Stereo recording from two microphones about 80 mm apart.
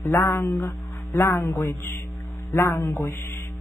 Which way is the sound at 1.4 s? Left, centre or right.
Left.